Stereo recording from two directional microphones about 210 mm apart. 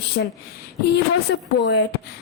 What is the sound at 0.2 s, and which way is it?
A woman's voice, 55° left (ahead or behind).